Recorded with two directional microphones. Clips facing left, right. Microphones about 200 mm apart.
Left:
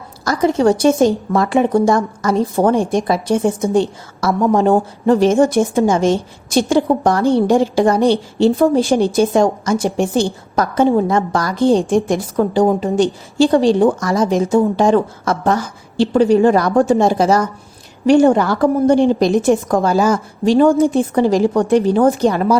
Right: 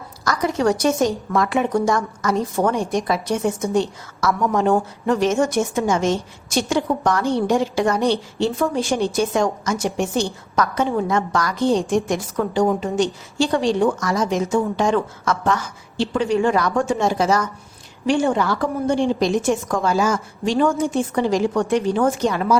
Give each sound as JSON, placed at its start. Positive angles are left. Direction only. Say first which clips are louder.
{"t": 0.3, "sound": "a woman's voice", "louder": "left 6 dB", "side_deg": 30}